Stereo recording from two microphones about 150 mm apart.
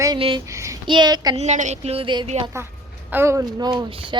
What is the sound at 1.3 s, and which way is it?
Speech, 50° right (ahead or behind).